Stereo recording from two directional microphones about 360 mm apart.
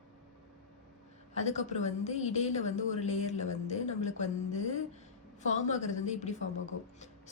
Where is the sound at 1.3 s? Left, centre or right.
Centre.